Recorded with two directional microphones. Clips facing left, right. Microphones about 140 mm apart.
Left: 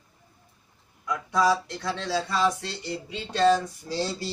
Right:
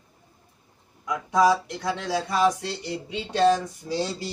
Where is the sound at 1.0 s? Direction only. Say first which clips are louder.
Right 3 dB; 15° right (ahead or behind).